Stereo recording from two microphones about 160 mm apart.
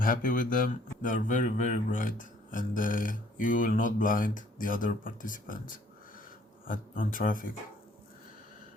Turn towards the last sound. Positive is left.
turn(degrees=60)  # may be behind; listen again after turning